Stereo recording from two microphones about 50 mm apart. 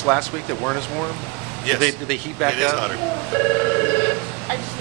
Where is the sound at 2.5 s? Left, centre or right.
Centre.